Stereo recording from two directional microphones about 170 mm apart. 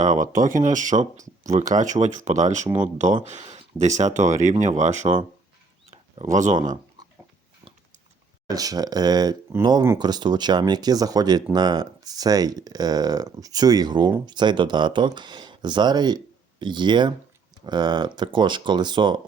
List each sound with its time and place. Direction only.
0.0 s speech: 50° right (ahead or behind)
8.4 s speech: 20° right (ahead or behind)